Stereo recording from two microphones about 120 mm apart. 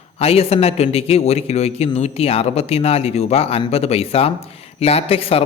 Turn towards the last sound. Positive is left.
turn(degrees=55)  # may be behind; listen again after turning